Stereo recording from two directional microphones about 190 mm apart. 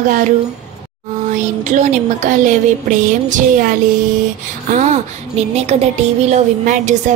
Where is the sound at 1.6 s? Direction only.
35° right (ahead or behind).